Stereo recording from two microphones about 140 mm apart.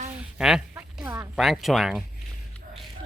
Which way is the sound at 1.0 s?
20° right (ahead or behind).